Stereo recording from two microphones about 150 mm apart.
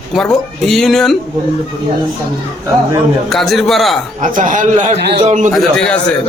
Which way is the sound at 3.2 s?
Centre (ahead or behind).